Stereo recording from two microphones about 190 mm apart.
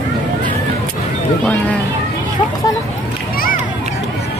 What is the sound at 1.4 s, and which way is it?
Speech, 5° left (ahead or behind).